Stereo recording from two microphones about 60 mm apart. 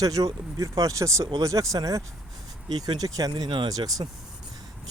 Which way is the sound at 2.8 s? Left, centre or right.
Right.